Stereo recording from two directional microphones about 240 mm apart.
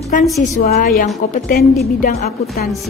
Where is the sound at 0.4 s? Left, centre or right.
Left.